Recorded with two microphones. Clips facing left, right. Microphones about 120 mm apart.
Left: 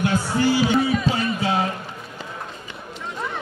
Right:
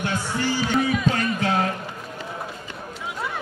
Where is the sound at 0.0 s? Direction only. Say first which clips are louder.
Left 5 dB; 10° left (ahead or behind).